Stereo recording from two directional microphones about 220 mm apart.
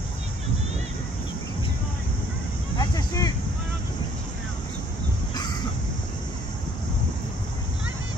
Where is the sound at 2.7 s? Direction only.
15° left (ahead or behind).